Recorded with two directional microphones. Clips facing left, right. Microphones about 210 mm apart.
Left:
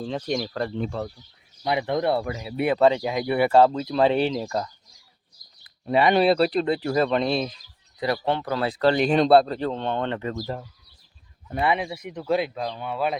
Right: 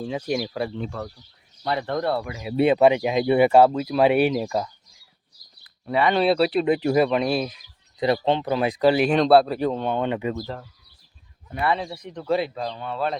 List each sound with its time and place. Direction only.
0.0 s speech: 5° right (ahead or behind)
1.6 s speech: 10° left (ahead or behind)
2.5 s speech: 30° right (ahead or behind)
2.7 s speech: 15° right (ahead or behind)
5.8 s speech: 20° left (ahead or behind)
6.2 s speech: centre (ahead or behind)
6.7 s speech: 20° right (ahead or behind)
7.9 s speech: 20° right (ahead or behind)
10.4 s speech: 10° left (ahead or behind)